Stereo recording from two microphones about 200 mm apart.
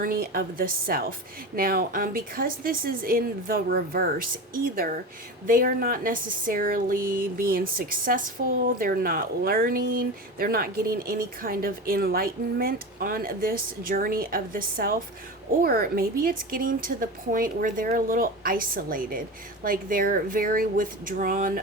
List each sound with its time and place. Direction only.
0.0 s speech: 45° right (ahead or behind)